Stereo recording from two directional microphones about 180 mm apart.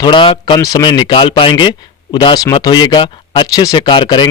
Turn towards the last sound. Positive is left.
turn(degrees=25)  # may be behind; listen again after turning